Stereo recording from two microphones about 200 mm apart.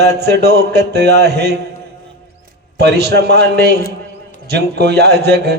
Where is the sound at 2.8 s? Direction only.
55° right (ahead or behind).